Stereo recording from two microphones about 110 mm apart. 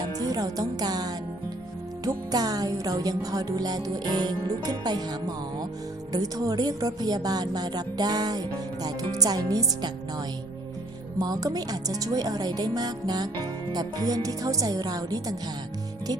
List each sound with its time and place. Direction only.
0.0 s music: 35° right (ahead or behind)
2.0 s speech: 35° right (ahead or behind)
6.1 s speech: 35° right (ahead or behind)